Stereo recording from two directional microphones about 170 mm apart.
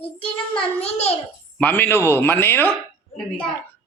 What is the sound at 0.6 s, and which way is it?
Speech, 40° left (ahead or behind).